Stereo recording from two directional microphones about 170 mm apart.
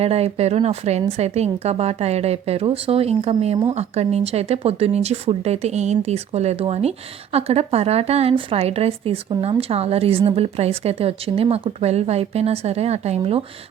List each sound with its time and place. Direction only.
0.0 s a woman's voice: 35° right (ahead or behind)